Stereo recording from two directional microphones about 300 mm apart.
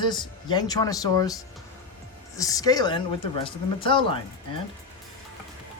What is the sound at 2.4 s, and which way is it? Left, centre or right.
Speech, centre.